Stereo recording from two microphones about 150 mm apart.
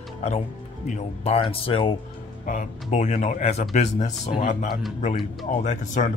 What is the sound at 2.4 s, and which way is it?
A man's voice, 55° left (ahead or behind).